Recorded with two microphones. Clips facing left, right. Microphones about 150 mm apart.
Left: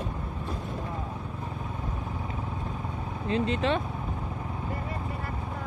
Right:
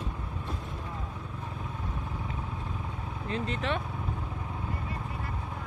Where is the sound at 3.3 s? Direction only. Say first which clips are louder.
Left 6 dB; 25° left (ahead or behind).